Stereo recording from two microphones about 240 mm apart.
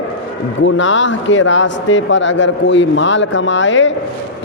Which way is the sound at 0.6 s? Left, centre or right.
Left.